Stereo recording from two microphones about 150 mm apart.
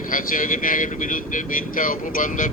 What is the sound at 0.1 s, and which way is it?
Speech, 65° left (ahead or behind).